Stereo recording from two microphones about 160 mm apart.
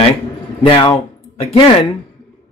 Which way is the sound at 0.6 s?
35° left (ahead or behind).